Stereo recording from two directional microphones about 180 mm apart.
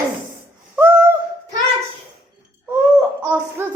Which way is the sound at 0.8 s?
15° right (ahead or behind).